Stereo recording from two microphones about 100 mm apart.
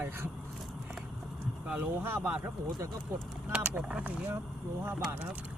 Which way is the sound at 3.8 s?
10° right (ahead or behind).